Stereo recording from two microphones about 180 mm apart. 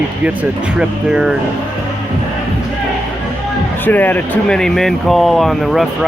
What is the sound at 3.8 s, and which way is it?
Speech, 10° left (ahead or behind).